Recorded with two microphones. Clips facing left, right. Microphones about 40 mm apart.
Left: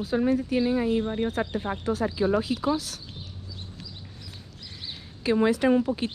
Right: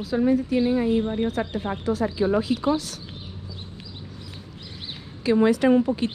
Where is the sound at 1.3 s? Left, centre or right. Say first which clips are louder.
Right 2 dB; left.